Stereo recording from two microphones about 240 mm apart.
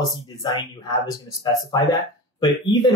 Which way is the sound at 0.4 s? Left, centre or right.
Centre.